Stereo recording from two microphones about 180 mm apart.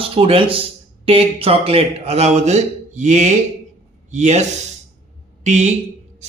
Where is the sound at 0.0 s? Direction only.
30° right (ahead or behind).